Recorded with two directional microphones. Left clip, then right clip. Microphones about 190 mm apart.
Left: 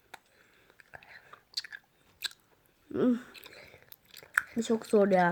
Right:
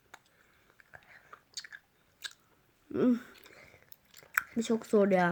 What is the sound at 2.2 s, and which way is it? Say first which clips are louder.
Biting: left 6 dB; 20° left (ahead or behind).